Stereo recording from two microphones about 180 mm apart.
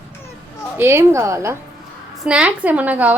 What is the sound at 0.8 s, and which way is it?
Speech, 15° right (ahead or behind).